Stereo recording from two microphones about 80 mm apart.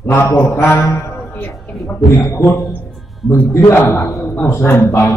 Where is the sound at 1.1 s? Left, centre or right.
Left.